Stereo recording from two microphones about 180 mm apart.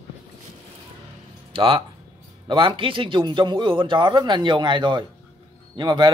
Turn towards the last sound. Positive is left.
turn(degrees=-25)  # may be behind; listen again after turning